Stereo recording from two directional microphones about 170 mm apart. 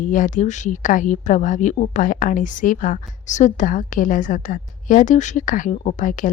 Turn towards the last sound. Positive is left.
turn(degrees=50)  # may be behind; listen again after turning